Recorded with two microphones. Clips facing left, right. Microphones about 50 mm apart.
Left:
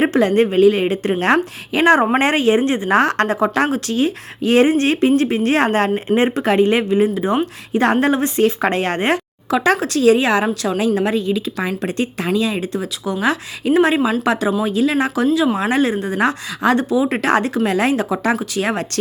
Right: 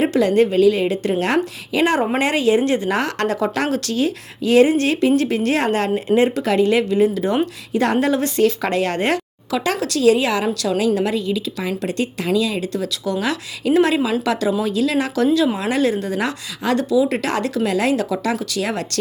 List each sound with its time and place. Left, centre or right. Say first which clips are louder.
0.0 s a woman's voice: left 1 dB; left
7.7 s a woman's voice: left 3 dB; left